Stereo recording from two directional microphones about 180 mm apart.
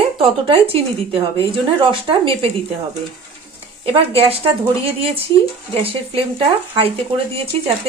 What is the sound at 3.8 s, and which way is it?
Speech, 30° right (ahead or behind).